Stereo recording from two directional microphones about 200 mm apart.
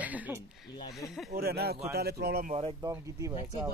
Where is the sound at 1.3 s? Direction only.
50° right (ahead or behind).